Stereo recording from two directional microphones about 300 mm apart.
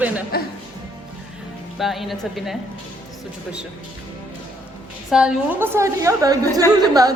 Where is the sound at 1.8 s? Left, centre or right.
Centre.